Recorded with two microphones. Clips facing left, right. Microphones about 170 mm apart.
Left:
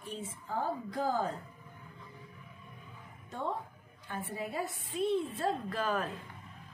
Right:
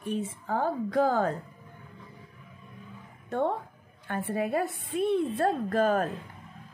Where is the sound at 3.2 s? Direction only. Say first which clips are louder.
Right 9 dB; 60° right (ahead or behind).